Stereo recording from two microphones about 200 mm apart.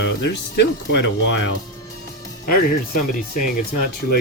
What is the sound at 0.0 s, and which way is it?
Burping, 60° left (ahead or behind).